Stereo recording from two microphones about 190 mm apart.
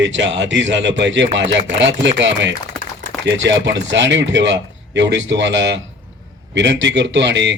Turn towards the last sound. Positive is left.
turn(degrees=-70)  # may be behind; listen again after turning